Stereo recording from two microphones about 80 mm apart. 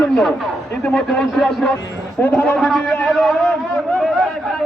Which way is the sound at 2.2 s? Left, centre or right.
Left.